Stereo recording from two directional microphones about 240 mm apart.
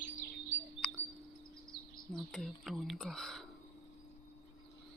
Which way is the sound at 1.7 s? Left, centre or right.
Centre.